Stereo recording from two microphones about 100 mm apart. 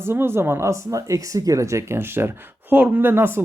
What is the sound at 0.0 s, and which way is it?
Speech, 25° right (ahead or behind).